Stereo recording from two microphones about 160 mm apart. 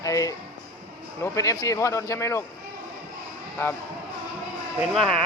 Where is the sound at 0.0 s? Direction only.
20° left (ahead or behind).